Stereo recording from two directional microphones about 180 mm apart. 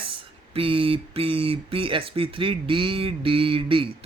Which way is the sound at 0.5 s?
30° right (ahead or behind).